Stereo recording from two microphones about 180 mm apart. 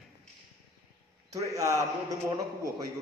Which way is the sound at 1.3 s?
15° right (ahead or behind).